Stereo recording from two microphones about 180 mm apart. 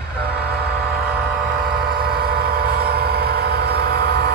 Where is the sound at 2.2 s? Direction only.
60° right (ahead or behind).